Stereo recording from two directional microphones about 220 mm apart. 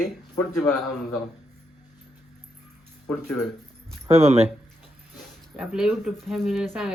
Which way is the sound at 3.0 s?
5° left (ahead or behind).